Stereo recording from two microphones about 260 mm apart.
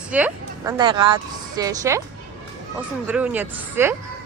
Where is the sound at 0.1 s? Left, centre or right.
Centre.